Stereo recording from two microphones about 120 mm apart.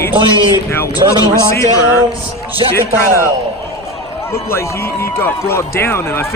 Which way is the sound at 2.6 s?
40° right (ahead or behind).